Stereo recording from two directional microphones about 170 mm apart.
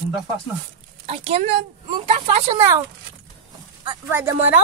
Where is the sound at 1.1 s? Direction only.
40° right (ahead or behind).